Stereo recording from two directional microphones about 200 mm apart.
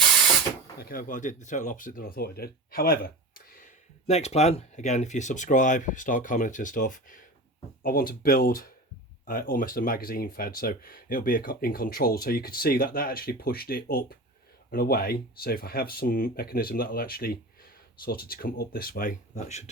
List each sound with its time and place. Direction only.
0.8 s speech: 45° left (ahead or behind)
4.0 s speech: 35° left (ahead or behind)